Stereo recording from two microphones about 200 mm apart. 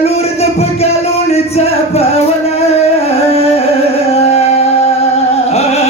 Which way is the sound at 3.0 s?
30° left (ahead or behind).